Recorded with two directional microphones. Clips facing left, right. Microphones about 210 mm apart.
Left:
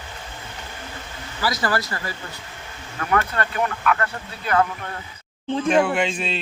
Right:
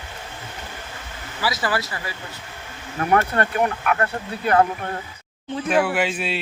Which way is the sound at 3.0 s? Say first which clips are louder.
Right 3 dB; 50° right (ahead or behind).